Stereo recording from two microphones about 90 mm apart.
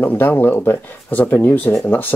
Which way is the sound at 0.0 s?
20° left (ahead or behind).